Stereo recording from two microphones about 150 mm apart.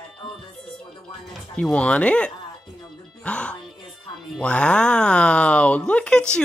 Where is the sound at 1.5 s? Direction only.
10° left (ahead or behind).